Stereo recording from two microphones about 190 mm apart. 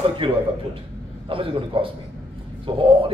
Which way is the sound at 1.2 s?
30° right (ahead or behind).